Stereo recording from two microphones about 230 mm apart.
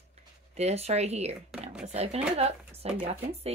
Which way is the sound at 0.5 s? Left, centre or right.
Right.